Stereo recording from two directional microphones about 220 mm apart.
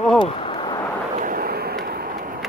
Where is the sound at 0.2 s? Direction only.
25° left (ahead or behind).